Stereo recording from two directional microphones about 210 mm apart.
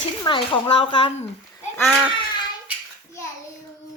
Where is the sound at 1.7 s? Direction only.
Centre (ahead or behind).